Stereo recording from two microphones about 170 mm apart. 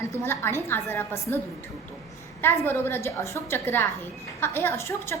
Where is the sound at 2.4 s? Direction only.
15° left (ahead or behind).